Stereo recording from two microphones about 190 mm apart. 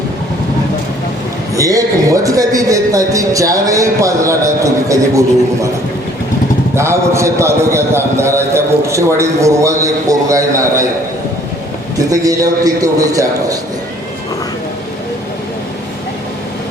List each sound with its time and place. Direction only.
1.5 s a man's voice: 15° right (ahead or behind)
6.7 s a man's voice: 15° right (ahead or behind)
11.9 s a man's voice: 20° right (ahead or behind)